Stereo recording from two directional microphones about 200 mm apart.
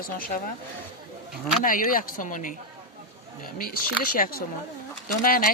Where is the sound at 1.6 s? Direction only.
45° left (ahead or behind).